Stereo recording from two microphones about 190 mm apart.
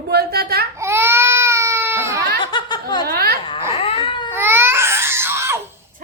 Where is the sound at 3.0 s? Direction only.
50° right (ahead or behind).